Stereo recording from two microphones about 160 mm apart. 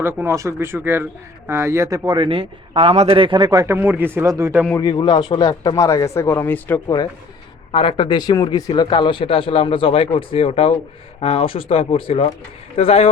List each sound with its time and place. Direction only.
0.0 s speech: 15° right (ahead or behind)
2.0 s a man's voice: 30° right (ahead or behind); by 4.6 s 15° right (ahead or behind)
4.8 s speech: 30° left (ahead or behind); by 6.9 s 10° left (ahead or behind)
7.7 s speech: 35° left (ahead or behind)